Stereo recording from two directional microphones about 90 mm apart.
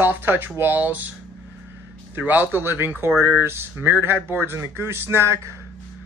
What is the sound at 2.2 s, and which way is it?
Speech, 20° right (ahead or behind).